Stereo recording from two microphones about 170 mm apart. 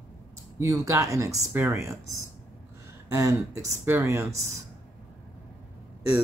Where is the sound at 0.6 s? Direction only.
15° right (ahead or behind).